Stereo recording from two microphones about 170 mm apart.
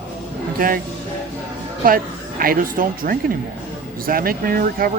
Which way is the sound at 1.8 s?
55° right (ahead or behind).